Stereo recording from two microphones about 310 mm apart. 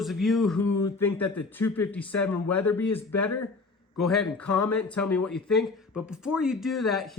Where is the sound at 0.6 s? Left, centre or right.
Left.